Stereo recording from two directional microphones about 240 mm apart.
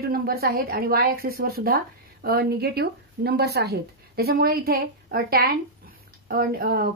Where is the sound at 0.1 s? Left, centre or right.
Right.